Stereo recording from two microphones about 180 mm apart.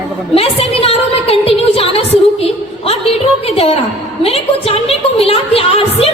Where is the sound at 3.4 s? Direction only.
35° left (ahead or behind).